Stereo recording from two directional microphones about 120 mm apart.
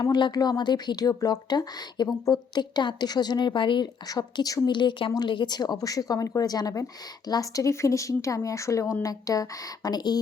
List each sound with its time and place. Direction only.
0.0 s speech: 35° left (ahead or behind)